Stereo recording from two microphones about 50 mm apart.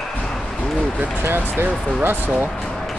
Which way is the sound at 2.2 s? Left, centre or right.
Right.